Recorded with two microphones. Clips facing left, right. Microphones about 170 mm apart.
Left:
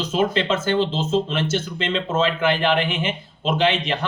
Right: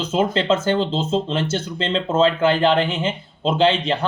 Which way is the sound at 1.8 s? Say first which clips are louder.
Right 5 dB; 30° right (ahead or behind).